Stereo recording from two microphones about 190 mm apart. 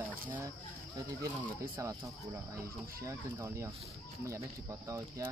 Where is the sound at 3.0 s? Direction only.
15° right (ahead or behind).